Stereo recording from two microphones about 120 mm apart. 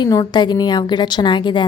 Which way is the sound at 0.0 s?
40° left (ahead or behind).